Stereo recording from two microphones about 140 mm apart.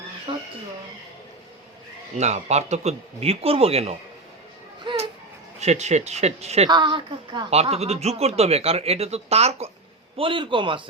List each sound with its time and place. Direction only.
0.3 s speech: 45° right (ahead or behind)
2.1 s speech: 55° right (ahead or behind)
4.9 s a sound: 35° right (ahead or behind)
5.5 s speech: 50° right (ahead or behind)
6.7 s a woman's voice: 30° right (ahead or behind)
7.5 s speech: 50° right (ahead or behind)
10.2 s a woman's voice: 35° right (ahead or behind)